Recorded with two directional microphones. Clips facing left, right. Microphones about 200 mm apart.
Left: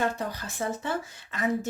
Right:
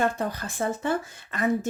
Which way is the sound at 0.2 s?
50° right (ahead or behind).